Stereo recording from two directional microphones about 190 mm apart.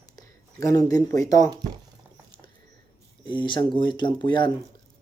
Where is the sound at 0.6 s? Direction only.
20° left (ahead or behind).